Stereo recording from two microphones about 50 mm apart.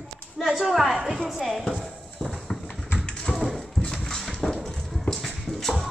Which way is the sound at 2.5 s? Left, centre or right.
Centre.